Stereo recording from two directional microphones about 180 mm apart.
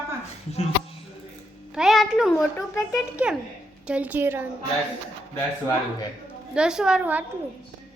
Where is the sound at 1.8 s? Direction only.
5° right (ahead or behind).